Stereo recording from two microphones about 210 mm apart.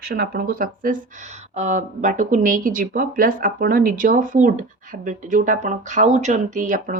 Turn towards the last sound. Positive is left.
turn(degrees=-40)  # may be behind; listen again after turning